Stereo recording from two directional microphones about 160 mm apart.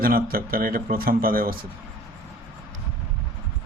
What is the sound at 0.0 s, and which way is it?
Speech, 65° right (ahead or behind).